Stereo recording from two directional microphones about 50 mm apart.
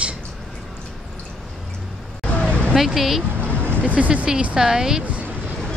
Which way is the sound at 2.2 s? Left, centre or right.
Left.